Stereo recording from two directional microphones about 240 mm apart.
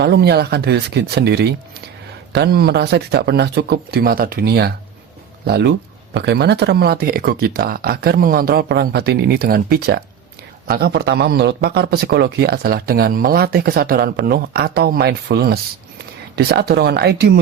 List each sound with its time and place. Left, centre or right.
0.0 s speech: right